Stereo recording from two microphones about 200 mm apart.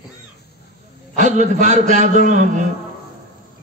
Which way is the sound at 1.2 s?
40° right (ahead or behind).